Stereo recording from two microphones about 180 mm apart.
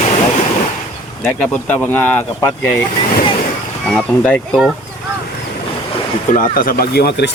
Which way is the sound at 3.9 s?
5° left (ahead or behind).